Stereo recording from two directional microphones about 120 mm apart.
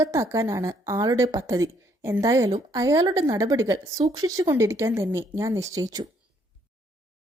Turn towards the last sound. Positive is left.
turn(degrees=-30)  # may be behind; listen again after turning